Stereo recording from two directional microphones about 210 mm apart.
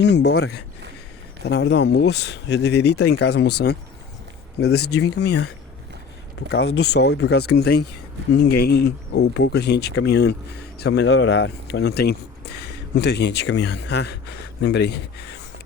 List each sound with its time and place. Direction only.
0.0 s speech: 55° left (ahead or behind)
4.6 s speech: 55° left (ahead or behind)
6.7 s speech: 55° left (ahead or behind)